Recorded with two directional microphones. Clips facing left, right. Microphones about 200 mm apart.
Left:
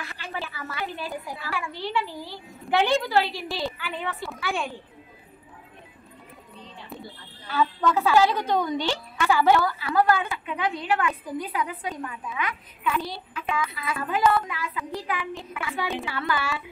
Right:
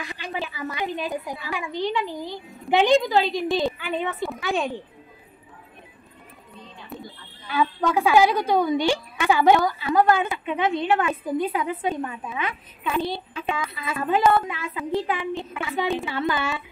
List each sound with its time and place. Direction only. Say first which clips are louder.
0.0 s a child's voice: right 4 dB; 15° right (ahead or behind)
6.9 s music: right 3 dB; centre (ahead or behind)
7.8 s a woman's voice: right 2 dB; 15° right (ahead or behind)